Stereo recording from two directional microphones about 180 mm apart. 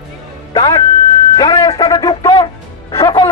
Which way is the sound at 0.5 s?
25° left (ahead or behind).